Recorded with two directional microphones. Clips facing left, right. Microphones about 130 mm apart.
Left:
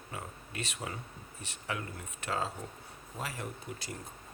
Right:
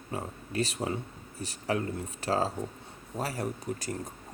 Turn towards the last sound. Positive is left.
turn(degrees=-40)  # may be behind; listen again after turning